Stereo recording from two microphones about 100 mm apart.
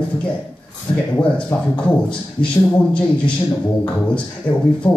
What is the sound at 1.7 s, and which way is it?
Speech, 10° left (ahead or behind).